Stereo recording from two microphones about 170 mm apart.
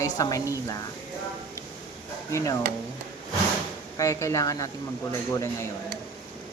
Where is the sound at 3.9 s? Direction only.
20° left (ahead or behind).